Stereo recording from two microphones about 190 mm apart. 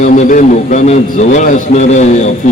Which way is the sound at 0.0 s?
40° left (ahead or behind).